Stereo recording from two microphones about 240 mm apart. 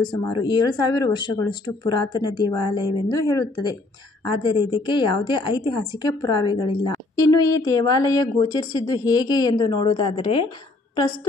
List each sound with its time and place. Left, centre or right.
0.0 s a woman's voice: centre